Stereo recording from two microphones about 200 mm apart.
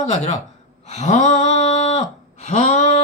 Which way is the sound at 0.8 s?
35° left (ahead or behind).